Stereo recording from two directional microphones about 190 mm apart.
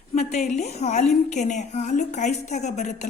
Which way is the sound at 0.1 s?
35° left (ahead or behind).